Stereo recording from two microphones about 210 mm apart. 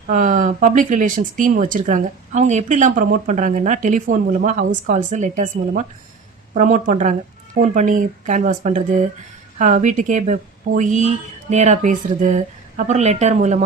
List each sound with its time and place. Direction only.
0.1 s speech: 40° right (ahead or behind)